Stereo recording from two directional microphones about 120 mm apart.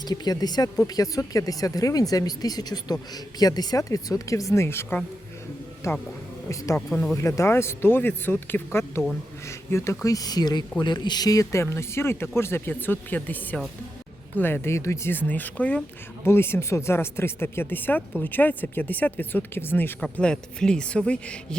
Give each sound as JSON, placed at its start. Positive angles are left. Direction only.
{"t": 0.0, "sound": "speech", "side_deg": 35}
{"t": 6.7, "sound": "speech", "side_deg": 10}
{"t": 7.2, "sound": "speech", "side_deg": 25}